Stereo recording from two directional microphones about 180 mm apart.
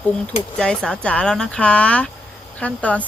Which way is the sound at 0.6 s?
5° left (ahead or behind).